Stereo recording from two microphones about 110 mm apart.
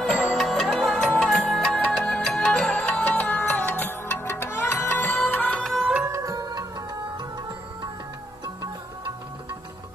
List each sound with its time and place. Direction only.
0.0 s music: centre (ahead or behind); by 5.6 s 15° left (ahead or behind)
5.6 s music: centre (ahead or behind)
6.0 s music: 30° right (ahead or behind)